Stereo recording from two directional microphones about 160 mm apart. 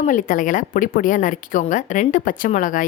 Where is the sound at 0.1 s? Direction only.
55° left (ahead or behind).